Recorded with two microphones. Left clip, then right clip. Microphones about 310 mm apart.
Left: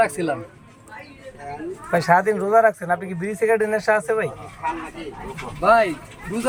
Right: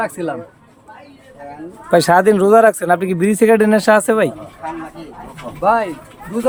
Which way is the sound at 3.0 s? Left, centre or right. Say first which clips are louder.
Right 9 dB; right.